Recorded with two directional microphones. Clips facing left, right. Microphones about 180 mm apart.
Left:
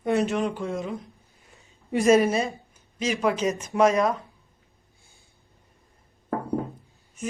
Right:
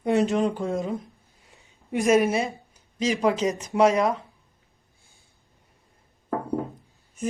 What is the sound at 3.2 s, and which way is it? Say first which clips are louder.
Speech: even; 20° right (ahead or behind).